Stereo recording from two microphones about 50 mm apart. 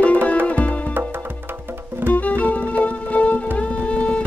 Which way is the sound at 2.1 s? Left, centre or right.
Left.